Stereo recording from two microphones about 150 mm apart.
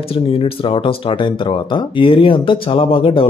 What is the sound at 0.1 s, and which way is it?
Speech, 40° left (ahead or behind).